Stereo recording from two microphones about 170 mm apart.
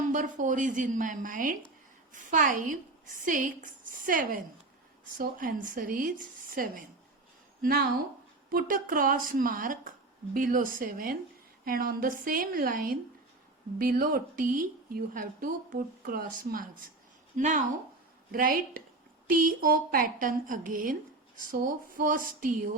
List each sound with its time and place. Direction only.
0.1 s a woman's voice: 50° right (ahead or behind)